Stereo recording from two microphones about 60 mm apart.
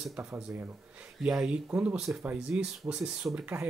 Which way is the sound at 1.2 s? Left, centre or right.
Centre.